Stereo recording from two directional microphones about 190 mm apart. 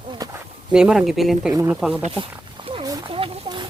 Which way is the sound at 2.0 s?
30° right (ahead or behind).